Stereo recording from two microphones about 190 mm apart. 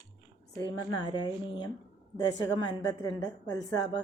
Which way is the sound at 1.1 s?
25° left (ahead or behind).